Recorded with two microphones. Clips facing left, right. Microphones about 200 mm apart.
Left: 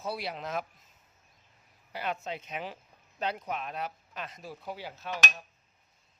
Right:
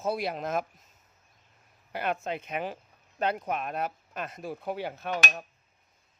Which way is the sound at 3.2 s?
55° right (ahead or behind).